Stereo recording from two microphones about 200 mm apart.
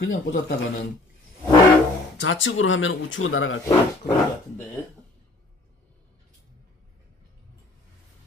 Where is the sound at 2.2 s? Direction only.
70° left (ahead or behind).